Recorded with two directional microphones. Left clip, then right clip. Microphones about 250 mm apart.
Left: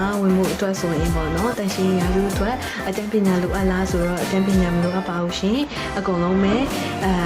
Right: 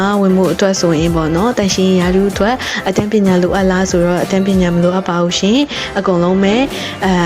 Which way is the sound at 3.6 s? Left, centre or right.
Right.